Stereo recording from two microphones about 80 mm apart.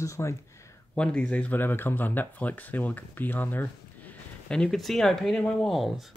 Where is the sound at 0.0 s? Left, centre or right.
Left.